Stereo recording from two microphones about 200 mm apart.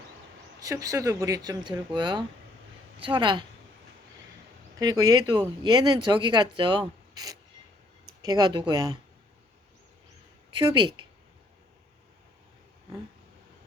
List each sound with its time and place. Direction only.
0.6 s speech: 15° right (ahead or behind)
4.8 s speech: 20° right (ahead or behind)
10.6 s speech: 25° right (ahead or behind)